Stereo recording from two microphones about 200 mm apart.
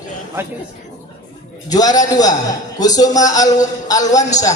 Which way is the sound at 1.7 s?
20° left (ahead or behind).